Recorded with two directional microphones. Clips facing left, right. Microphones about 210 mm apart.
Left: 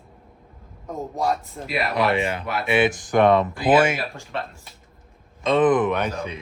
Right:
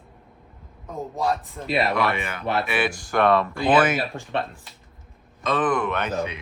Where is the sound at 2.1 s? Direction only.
30° left (ahead or behind).